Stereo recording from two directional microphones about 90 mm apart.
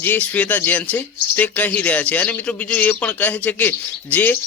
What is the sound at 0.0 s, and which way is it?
A man's voice, 20° left (ahead or behind).